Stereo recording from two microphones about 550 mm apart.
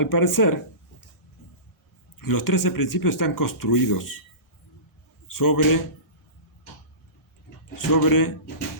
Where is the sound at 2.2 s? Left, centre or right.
Left.